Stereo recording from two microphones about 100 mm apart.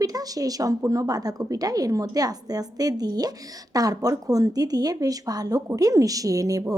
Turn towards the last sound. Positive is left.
turn(degrees=-35)  # may be behind; listen again after turning